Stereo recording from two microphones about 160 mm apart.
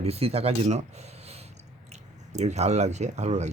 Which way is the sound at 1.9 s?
45° right (ahead or behind).